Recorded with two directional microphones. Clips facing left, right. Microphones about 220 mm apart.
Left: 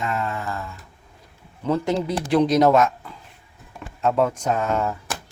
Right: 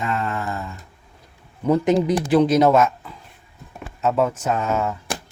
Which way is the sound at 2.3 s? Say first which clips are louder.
Right 1 dB; centre (ahead or behind).